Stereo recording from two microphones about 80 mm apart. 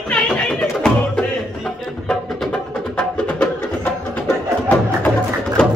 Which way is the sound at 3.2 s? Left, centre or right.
Centre.